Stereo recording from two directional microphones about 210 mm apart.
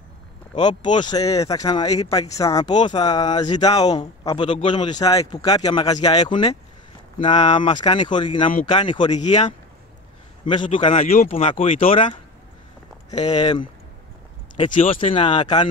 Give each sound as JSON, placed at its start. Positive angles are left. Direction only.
{"t": 0.6, "sound": "a man's voice", "side_deg": 20}
{"t": 10.5, "sound": "speech", "side_deg": 25}
{"t": 13.2, "sound": "speech", "side_deg": 20}
{"t": 14.7, "sound": "speech", "side_deg": 35}
{"t": 15.0, "sound": "speech", "side_deg": 25}